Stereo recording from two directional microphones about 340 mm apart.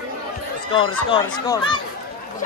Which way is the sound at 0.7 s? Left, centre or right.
Centre.